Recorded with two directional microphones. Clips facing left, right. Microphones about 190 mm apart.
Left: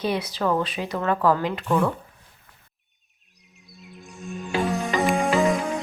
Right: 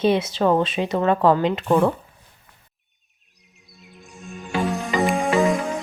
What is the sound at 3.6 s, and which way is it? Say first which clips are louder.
Music: left 2 dB; centre (ahead or behind).